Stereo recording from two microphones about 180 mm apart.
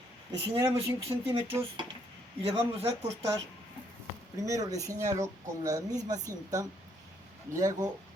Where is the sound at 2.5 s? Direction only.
35° right (ahead or behind).